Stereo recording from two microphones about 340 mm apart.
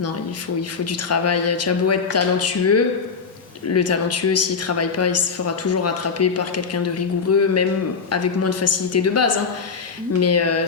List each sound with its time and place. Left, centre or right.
0.9 s a woman's voice: left